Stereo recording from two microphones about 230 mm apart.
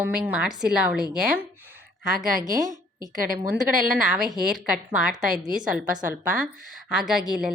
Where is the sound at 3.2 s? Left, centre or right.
Right.